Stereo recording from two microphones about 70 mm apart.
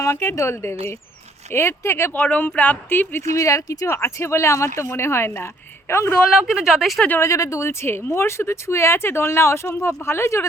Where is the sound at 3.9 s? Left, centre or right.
Left.